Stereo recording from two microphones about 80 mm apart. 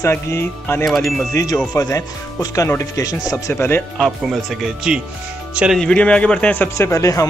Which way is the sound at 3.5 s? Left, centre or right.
Left.